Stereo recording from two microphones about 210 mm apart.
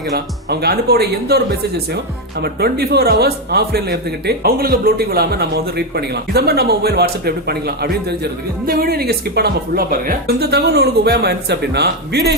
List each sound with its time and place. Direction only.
0.5 s a man's voice: 50° right (ahead or behind)